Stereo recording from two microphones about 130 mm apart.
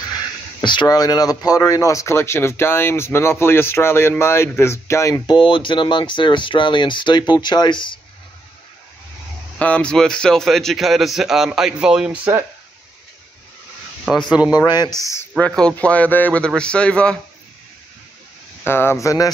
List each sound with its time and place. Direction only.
0.6 s speech: 35° left (ahead or behind)
5.2 s speech: 40° left (ahead or behind)
9.6 s a man's voice: 10° left (ahead or behind); by 12.2 s 5° right (ahead or behind)
14.1 s a man's voice: 5° left (ahead or behind)
14.5 s speech: 30° left (ahead or behind)
15.3 s a man's voice: 10° left (ahead or behind)
18.6 s speech: 20° left (ahead or behind)